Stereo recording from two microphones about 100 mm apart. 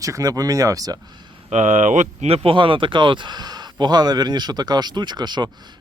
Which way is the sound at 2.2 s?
75° right (ahead or behind).